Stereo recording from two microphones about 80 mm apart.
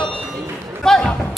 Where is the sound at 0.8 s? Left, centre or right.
Centre.